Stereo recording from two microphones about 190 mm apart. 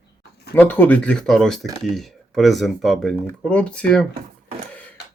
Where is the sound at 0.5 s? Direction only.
10° left (ahead or behind).